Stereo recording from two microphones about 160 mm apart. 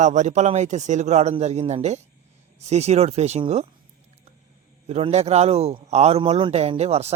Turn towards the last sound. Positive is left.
turn(degrees=-40)  # may be behind; listen again after turning